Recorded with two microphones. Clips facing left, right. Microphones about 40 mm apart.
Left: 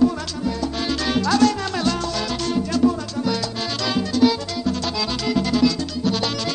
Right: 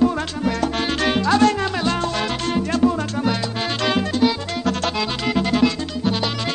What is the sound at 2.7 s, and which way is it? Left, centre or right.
Music, right.